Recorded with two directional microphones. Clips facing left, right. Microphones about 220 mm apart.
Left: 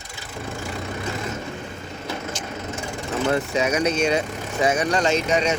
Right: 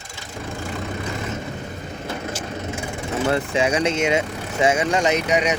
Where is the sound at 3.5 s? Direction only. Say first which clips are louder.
Right 1 dB; 25° right (ahead or behind).